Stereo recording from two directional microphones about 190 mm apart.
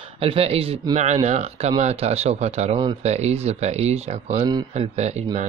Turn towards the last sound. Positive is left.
turn(degrees=-35)  # may be behind; listen again after turning